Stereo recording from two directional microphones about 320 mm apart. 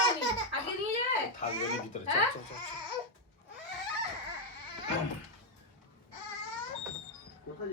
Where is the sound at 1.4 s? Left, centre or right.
Left.